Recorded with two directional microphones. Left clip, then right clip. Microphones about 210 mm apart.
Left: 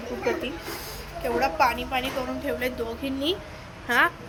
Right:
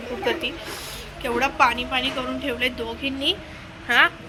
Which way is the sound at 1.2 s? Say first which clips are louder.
Right 3 dB; centre (ahead or behind).